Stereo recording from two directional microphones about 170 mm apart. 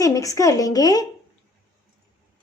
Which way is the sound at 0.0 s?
20° left (ahead or behind).